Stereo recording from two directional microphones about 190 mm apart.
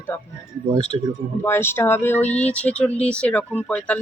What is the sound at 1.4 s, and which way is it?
Speech, 10° left (ahead or behind).